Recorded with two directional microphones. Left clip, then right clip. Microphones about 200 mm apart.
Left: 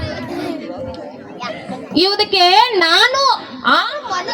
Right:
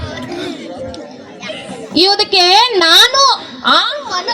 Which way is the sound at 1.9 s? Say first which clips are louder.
Right 3 dB; 20° right (ahead or behind).